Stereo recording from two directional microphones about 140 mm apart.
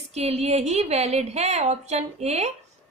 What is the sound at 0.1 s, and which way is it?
A woman's voice, 50° right (ahead or behind).